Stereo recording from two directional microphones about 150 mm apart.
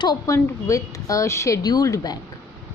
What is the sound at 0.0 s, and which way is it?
A woman's voice, 30° left (ahead or behind).